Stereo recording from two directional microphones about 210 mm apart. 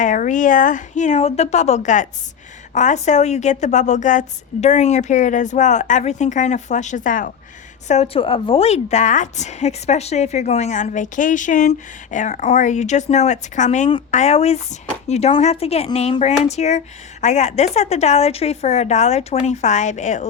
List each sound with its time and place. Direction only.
0.0 s a woman's voice: 35° left (ahead or behind)